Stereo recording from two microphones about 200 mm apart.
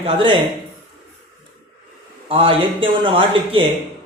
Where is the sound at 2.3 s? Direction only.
25° right (ahead or behind).